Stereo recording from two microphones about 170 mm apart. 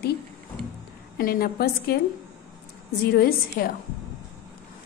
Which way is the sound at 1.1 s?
65° left (ahead or behind).